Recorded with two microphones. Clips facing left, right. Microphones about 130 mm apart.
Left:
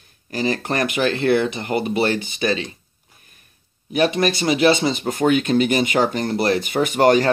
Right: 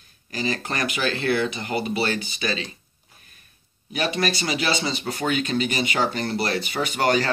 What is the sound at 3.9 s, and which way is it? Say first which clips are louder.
Speech: left 6 dB; 55° left (ahead or behind).